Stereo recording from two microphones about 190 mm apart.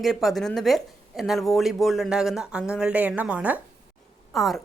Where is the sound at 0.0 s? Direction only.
Centre (ahead or behind).